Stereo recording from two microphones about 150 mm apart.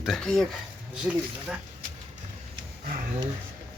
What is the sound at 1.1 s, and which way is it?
Speech, 5° right (ahead or behind).